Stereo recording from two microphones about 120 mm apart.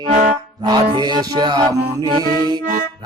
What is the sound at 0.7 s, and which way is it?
Music, 35° right (ahead or behind).